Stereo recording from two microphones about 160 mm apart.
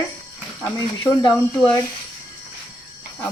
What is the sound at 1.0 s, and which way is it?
Speech, 25° left (ahead or behind).